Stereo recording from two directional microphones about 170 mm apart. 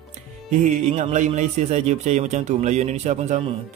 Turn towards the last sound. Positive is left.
turn(degrees=-45)  # may be behind; listen again after turning